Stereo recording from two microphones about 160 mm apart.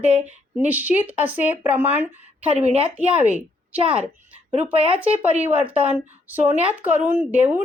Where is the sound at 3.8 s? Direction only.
35° right (ahead or behind).